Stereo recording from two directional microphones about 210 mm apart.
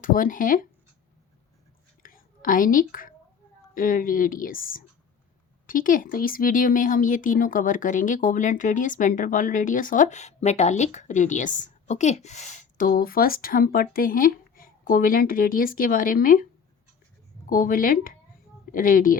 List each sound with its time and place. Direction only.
0.0 s speech: 40° left (ahead or behind)
2.0 s whispering: 40° left (ahead or behind)
3.8 s speech: 40° left (ahead or behind)